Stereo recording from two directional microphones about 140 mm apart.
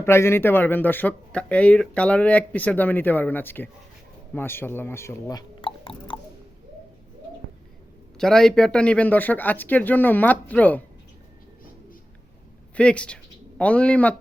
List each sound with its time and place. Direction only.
0.0 s speech: 15° left (ahead or behind); by 6.1 s 40° left (ahead or behind)
8.2 s speech: 5° left (ahead or behind)
12.7 s speech: 10° left (ahead or behind)